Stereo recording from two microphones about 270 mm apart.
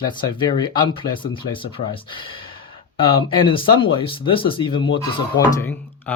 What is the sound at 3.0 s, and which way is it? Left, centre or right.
Speech, centre.